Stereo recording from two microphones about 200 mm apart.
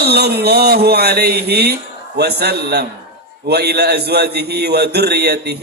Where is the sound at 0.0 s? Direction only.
55° right (ahead or behind).